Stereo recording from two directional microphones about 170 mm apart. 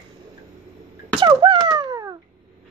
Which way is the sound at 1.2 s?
25° right (ahead or behind).